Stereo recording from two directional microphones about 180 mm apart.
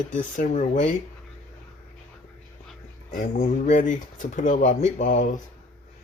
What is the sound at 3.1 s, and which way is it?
Speech, 45° left (ahead or behind).